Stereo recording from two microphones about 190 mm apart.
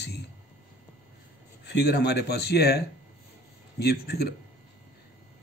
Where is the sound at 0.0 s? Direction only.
60° left (ahead or behind).